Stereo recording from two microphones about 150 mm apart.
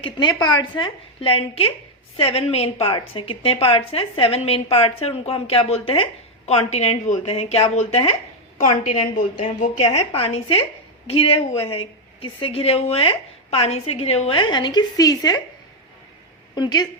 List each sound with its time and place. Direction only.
0.0 s a woman's voice: 30° left (ahead or behind)
9.4 s a woman's voice: 50° left (ahead or behind); by 15.4 s 25° left (ahead or behind)
16.6 s a woman's voice: 30° left (ahead or behind)